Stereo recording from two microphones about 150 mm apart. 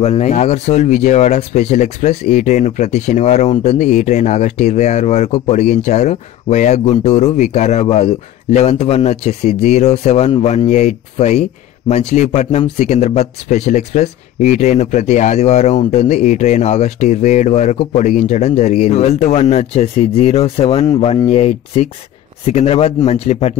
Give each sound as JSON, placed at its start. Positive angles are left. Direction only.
{"t": 0.0, "sound": "speech", "side_deg": 45}
{"t": 21.3, "sound": "speech", "side_deg": 45}